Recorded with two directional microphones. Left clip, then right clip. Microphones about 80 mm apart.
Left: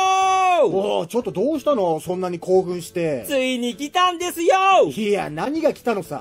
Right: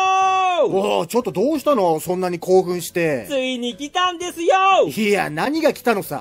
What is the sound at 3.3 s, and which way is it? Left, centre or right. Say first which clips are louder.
Speech: left 1 dB; left.